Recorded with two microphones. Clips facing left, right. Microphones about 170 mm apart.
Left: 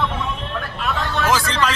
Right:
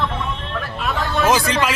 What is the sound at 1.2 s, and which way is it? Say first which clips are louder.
Speech: right 2 dB; 15° right (ahead or behind).